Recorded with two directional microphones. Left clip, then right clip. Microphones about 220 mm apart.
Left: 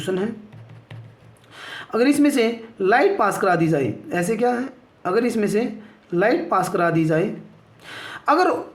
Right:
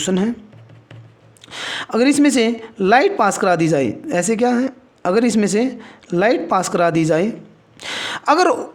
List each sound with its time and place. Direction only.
0.0 s a woman's voice: 45° right (ahead or behind)
1.5 s a woman's voice: 45° right (ahead or behind)